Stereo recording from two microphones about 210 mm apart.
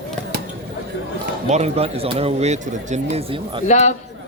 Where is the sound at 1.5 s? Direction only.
30° right (ahead or behind).